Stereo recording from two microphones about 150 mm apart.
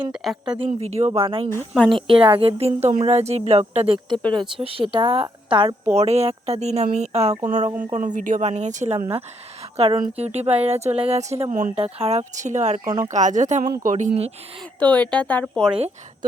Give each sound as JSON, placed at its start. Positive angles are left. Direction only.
{"t": 0.1, "sound": "a woman's voice", "side_deg": 0}
{"t": 1.1, "sound": "a woman's voice", "side_deg": -35}
{"t": 8.4, "sound": "speech", "side_deg": -50}
{"t": 14.8, "sound": "speech", "side_deg": 10}